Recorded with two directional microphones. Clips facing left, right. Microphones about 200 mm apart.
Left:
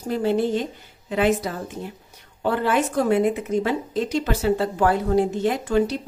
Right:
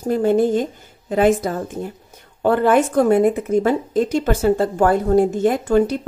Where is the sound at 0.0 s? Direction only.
50° right (ahead or behind).